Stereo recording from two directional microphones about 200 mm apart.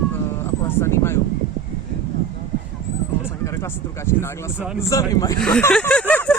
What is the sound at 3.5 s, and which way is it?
Speech, 15° left (ahead or behind).